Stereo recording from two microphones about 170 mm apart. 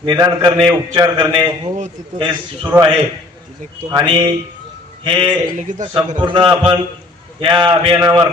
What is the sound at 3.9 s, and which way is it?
A man's voice, 25° right (ahead or behind).